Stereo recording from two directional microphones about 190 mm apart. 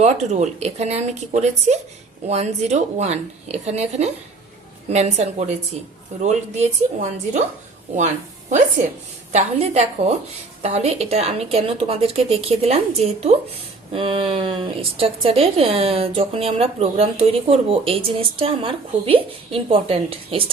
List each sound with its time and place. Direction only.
0.0 s a woman's voice: 35° right (ahead or behind)